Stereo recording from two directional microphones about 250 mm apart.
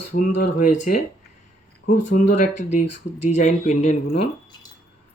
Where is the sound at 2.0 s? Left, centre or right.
Left.